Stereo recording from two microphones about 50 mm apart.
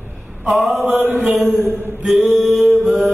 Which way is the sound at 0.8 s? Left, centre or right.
Right.